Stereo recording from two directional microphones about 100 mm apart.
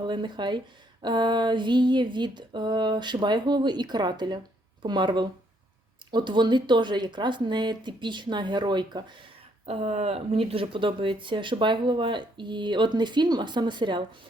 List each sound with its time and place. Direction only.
0.0 s speech: 50° right (ahead or behind)
9.6 s speech: 90° right; by 14.0 s 50° right (ahead or behind)